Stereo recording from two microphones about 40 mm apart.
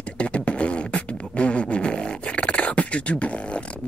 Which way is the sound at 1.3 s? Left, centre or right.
Left.